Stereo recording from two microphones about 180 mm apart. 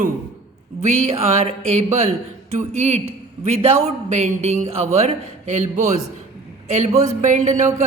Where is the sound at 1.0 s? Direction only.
35° right (ahead or behind).